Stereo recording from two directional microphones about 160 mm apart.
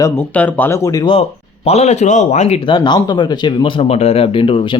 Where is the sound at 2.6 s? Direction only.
30° left (ahead or behind).